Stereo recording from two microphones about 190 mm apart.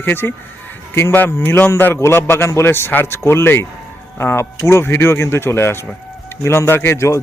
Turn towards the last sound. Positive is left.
turn(degrees=15)  # may be behind; listen again after turning